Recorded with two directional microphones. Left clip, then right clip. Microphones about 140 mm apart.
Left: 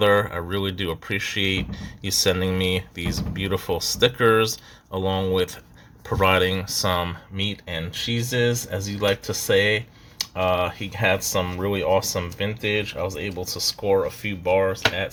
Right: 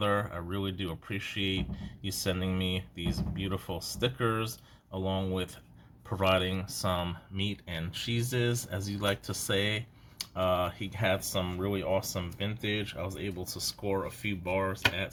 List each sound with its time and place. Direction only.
0.0 s speech: 25° left (ahead or behind)
7.3 s speech: 10° left (ahead or behind)